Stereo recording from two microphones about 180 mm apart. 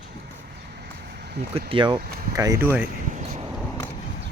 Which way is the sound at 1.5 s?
30° right (ahead or behind).